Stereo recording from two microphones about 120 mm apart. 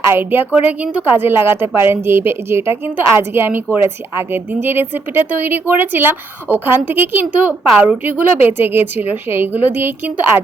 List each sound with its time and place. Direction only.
0.1 s a woman's voice: 20° right (ahead or behind)